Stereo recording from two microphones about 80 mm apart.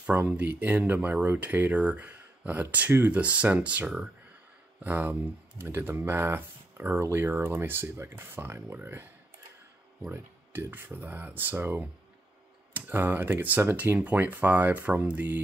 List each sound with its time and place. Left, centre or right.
0.2 s speech: centre
10.1 s speech: right